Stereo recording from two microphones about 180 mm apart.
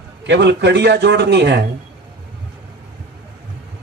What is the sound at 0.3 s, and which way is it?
Speech, 70° right (ahead or behind).